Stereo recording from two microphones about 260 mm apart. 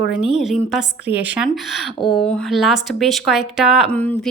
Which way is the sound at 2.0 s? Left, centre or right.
Centre.